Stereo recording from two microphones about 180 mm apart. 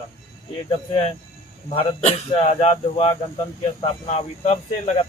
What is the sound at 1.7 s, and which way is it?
Speech, 35° left (ahead or behind).